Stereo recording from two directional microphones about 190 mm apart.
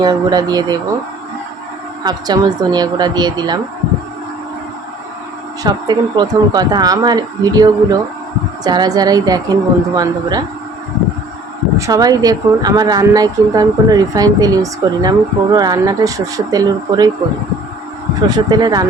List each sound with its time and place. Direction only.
0.0 s speech: 20° right (ahead or behind)
2.0 s speech: 20° right (ahead or behind)
5.6 s speech: 20° right (ahead or behind)
11.8 s speech: 20° right (ahead or behind)
18.3 s speech: 20° right (ahead or behind)